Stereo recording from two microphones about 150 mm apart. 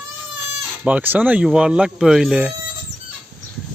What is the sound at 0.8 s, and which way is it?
Speech, 10° right (ahead or behind).